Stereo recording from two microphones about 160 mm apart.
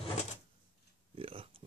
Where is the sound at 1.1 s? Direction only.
35° right (ahead or behind).